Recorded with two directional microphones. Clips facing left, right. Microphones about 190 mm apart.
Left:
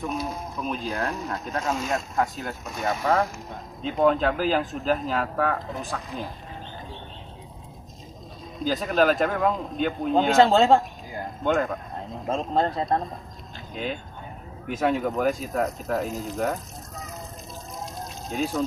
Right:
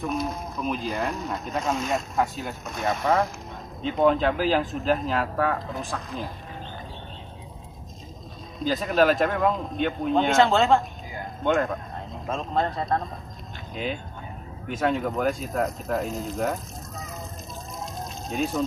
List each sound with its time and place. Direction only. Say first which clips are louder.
0.0 s speech: right 2 dB; centre (ahead or behind)
8.6 s speech: even; centre (ahead or behind)
10.3 s speech: left 3 dB; 35° left (ahead or behind)
11.4 s speech: right 1 dB; centre (ahead or behind)
12.3 s speech: left 2 dB; 30° left (ahead or behind)
13.7 s speech: even; centre (ahead or behind)
18.3 s speech: even; centre (ahead or behind)